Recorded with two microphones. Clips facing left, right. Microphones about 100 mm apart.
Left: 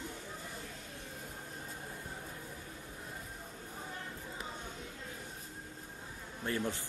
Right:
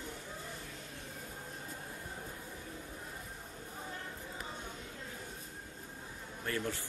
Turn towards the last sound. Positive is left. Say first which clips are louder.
# left 1 dB
turn(degrees=20)  # may be behind; listen again after turning